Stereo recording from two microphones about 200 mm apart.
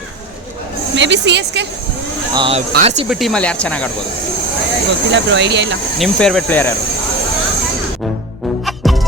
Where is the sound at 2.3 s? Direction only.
25° right (ahead or behind).